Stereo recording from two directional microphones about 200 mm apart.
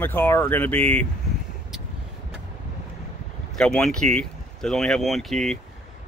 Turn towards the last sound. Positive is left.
turn(degrees=0)  # may be behind; listen again after turning